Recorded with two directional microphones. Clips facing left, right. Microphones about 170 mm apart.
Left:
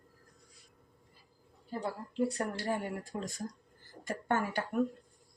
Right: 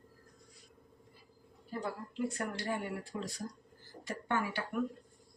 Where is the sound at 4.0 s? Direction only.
50° left (ahead or behind).